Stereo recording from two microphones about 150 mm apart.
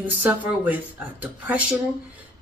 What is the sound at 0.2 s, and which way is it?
Speech, 10° right (ahead or behind).